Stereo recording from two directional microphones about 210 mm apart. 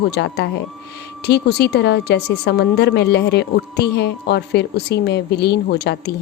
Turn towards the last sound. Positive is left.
turn(degrees=55)  # may be behind; listen again after turning